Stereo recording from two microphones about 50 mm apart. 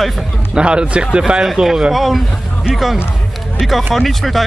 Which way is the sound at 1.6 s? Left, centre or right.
Centre.